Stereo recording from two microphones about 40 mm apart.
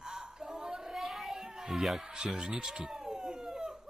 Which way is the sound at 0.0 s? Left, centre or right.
Centre.